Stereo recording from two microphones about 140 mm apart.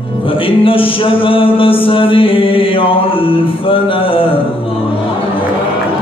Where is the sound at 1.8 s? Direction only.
40° left (ahead or behind).